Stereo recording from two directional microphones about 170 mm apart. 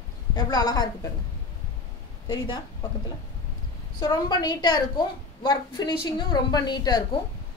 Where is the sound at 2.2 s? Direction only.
25° left (ahead or behind).